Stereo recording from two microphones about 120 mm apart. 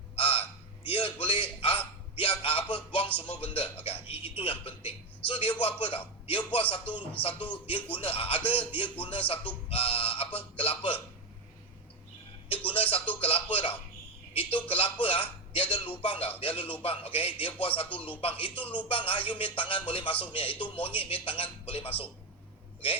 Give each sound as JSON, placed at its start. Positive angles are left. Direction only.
{"t": 0.2, "sound": "honk", "side_deg": 50}
{"t": 0.9, "sound": "a man's voice", "side_deg": 50}
{"t": 12.5, "sound": "a man's voice", "side_deg": 50}